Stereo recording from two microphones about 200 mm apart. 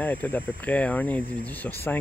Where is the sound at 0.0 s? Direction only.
10° left (ahead or behind).